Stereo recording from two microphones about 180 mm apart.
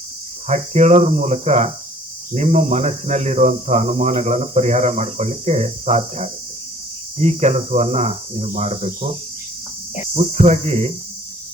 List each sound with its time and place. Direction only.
0.4 s speech: 40° right (ahead or behind)
10.2 s speech: 35° right (ahead or behind)